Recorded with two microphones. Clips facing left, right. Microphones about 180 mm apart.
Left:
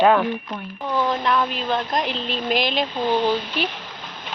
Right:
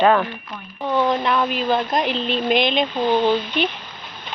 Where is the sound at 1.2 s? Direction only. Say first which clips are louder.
Right 2 dB; centre (ahead or behind).